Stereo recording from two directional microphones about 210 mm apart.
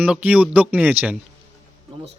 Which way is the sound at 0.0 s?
5° right (ahead or behind).